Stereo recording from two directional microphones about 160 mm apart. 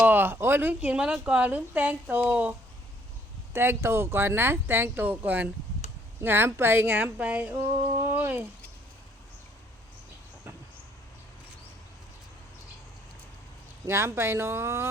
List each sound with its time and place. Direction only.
0.0 s speech: 10° right (ahead or behind)
13.8 s speech: 15° right (ahead or behind)